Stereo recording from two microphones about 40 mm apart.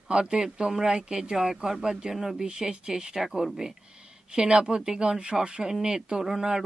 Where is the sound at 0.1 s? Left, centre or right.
Right.